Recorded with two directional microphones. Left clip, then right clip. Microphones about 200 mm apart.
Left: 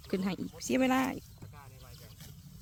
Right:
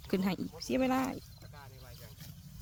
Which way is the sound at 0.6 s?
20° left (ahead or behind).